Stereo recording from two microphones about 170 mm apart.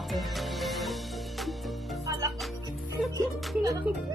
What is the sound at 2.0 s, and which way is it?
Music, 20° right (ahead or behind).